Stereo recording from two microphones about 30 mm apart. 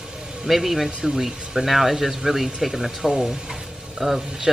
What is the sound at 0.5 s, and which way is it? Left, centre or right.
Speech, centre.